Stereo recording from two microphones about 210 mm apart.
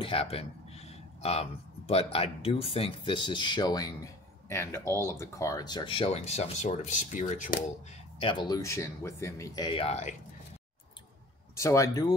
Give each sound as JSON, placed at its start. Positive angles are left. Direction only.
{"t": 0.0, "sound": "speech", "side_deg": 25}
{"t": 8.2, "sound": "speech", "side_deg": 20}
{"t": 11.5, "sound": "speech", "side_deg": 15}